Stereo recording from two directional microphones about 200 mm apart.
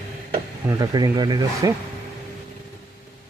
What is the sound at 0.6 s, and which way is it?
Speech, 20° right (ahead or behind).